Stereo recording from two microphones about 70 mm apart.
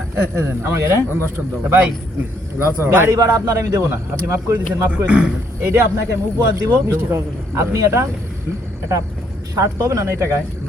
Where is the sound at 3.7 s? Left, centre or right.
Right.